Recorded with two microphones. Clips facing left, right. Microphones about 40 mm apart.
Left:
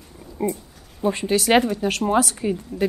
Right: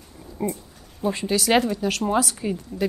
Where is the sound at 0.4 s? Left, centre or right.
Centre.